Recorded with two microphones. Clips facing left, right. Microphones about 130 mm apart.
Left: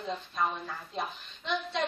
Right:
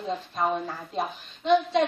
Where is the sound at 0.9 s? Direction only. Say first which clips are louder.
Right 6 dB; 40° right (ahead or behind).